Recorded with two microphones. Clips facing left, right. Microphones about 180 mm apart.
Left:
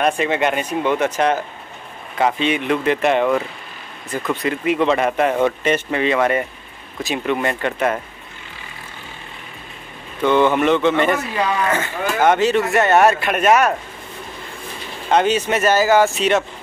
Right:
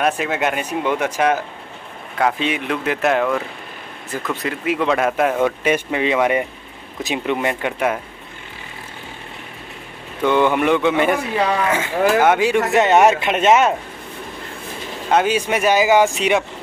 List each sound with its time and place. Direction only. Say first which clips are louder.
0.0 s speech: left 2 dB; 5° right (ahead or behind)
10.2 s speech: left 1 dB; 10° right (ahead or behind)
15.0 s speech: left 1 dB; 5° right (ahead or behind)